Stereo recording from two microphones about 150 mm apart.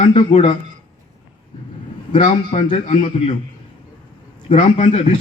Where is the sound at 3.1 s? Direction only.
40° left (ahead or behind).